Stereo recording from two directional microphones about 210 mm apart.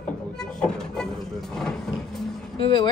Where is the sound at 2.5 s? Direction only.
25° left (ahead or behind).